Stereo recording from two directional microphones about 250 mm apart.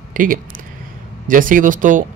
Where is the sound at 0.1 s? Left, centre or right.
Right.